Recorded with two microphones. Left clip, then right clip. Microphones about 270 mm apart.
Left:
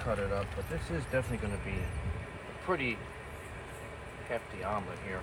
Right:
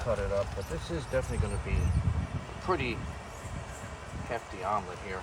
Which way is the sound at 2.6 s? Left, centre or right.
Centre.